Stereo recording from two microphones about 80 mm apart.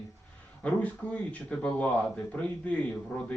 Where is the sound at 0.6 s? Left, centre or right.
Centre.